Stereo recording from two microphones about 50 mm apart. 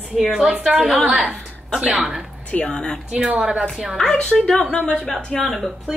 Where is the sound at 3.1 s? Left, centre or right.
Right.